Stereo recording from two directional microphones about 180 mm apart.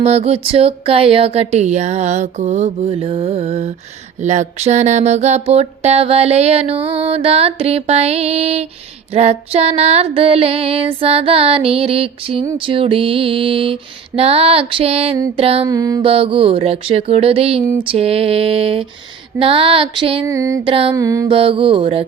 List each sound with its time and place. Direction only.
0.0 s music: 35° right (ahead or behind)
15.7 s mantra: 20° right (ahead or behind)
16.0 s music: 30° right (ahead or behind)
20.2 s music: 15° right (ahead or behind)
20.7 s music: 30° right (ahead or behind)
20.9 s mantra: 20° right (ahead or behind)
21.2 s music: 30° right (ahead or behind)